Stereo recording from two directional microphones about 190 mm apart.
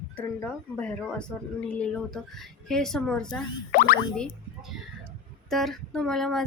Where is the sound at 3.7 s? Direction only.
50° left (ahead or behind).